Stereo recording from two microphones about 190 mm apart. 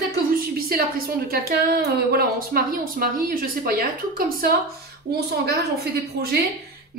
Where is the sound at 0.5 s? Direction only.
50° right (ahead or behind).